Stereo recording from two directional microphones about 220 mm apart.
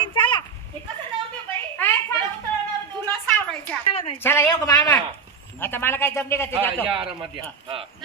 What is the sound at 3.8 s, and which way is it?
Speech, 25° left (ahead or behind).